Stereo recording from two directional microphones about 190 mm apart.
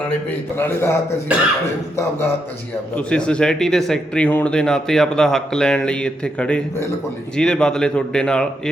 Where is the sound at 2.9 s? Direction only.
5° left (ahead or behind).